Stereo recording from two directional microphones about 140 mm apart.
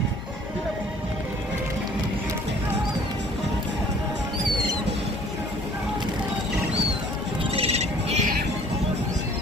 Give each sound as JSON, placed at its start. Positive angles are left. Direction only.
{"t": 7.5, "sound": "owl", "side_deg": -45}